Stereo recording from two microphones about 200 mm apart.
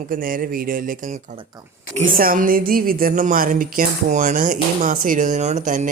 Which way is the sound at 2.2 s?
45° right (ahead or behind).